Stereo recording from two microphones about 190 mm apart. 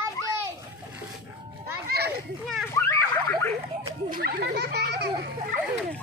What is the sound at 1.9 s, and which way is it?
Children playing, 60° right (ahead or behind).